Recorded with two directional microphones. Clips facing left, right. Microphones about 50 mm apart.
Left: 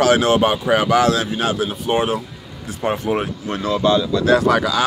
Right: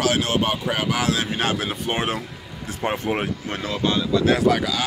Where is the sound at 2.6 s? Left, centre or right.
Right.